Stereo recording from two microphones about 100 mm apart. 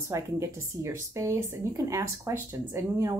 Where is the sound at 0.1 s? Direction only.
30° right (ahead or behind).